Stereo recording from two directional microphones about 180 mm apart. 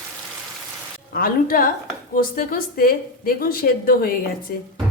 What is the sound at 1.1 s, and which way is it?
A woman's voice, 55° left (ahead or behind).